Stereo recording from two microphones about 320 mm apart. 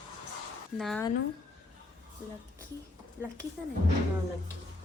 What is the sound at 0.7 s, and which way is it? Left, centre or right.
Speech, centre.